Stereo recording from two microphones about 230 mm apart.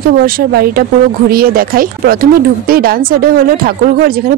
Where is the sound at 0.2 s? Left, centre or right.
Right.